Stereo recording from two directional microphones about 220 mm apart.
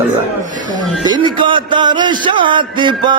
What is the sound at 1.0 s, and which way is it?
Speech, 20° right (ahead or behind).